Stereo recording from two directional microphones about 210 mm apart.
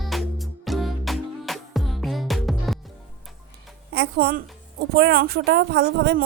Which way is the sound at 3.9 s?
45° right (ahead or behind).